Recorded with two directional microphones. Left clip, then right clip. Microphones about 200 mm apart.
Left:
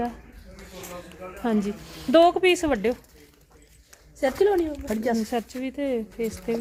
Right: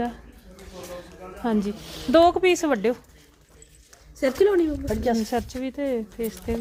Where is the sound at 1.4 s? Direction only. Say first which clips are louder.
Right 1 dB; 5° left (ahead or behind).